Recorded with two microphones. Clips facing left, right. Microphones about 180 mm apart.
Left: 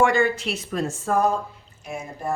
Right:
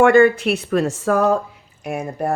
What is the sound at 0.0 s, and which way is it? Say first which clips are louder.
Speech: right 8 dB; 60° right (ahead or behind).